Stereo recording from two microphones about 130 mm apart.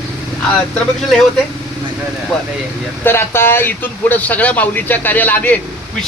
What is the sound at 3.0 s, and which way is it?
Speech, 20° left (ahead or behind).